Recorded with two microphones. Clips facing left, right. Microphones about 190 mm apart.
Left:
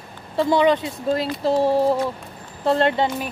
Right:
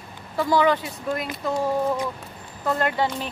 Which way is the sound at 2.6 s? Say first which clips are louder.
Left 5 dB; 30° left (ahead or behind).